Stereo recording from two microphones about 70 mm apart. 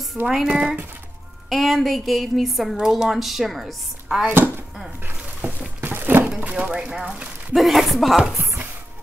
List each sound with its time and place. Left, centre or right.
0.2 s speech: centre
1.5 s speech: centre
5.4 s a sound: right
6.4 s speech: centre
7.5 s speech: centre